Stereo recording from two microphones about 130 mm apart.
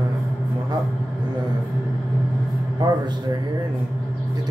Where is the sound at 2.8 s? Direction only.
35° right (ahead or behind).